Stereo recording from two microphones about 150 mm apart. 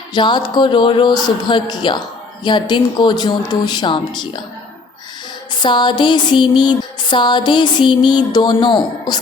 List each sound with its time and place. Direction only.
0.1 s music: 30° left (ahead or behind)
2.4 s speech: 30° left (ahead or behind)
5.5 s music: 30° left (ahead or behind)